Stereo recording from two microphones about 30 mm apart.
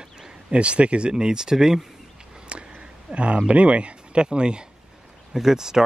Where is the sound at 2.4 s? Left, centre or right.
Right.